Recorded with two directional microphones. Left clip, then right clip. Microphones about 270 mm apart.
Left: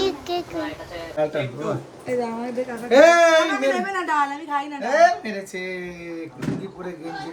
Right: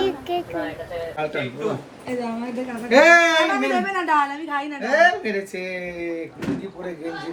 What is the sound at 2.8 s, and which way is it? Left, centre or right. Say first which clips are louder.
Speech: even; centre.